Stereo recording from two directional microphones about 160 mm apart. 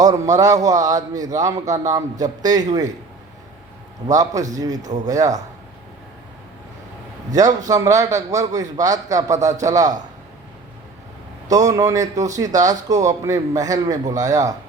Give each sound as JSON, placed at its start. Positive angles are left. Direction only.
{"t": 0.0, "sound": "a man's voice", "side_deg": -20}
{"t": 4.0, "sound": "a man's voice", "side_deg": -20}
{"t": 7.7, "sound": "a man's voice", "side_deg": -20}
{"t": 11.5, "sound": "a man's voice", "side_deg": -20}